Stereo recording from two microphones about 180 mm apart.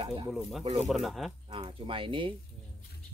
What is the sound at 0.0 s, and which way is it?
Speech, 25° right (ahead or behind).